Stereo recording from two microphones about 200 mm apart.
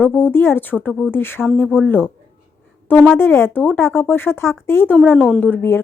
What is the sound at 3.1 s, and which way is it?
A woman's voice, 10° left (ahead or behind).